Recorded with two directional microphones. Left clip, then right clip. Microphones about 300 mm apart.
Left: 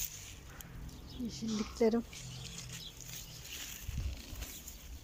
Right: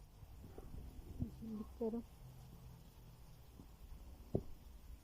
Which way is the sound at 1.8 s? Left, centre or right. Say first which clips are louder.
Left 13 dB; left.